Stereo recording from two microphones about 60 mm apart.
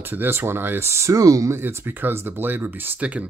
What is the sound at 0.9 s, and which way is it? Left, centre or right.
Speech, right.